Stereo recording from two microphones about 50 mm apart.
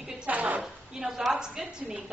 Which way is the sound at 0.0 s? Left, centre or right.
Centre.